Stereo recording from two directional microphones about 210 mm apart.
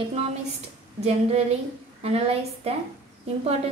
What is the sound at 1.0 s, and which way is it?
A woman's voice, 30° right (ahead or behind).